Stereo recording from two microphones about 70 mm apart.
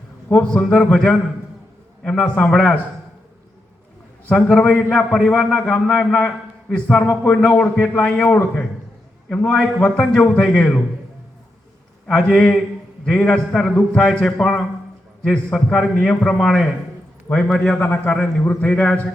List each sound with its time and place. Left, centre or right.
0.3 s a man's voice: left
4.3 s a man's voice: centre
9.3 s a man's voice: centre
12.0 s a man's voice: centre
17.7 s a man's voice: left